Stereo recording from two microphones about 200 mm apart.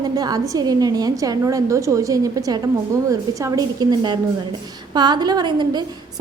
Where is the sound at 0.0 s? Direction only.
20° right (ahead or behind).